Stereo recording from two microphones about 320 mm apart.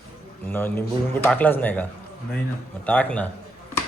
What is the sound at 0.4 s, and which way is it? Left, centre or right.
A man's voice, centre.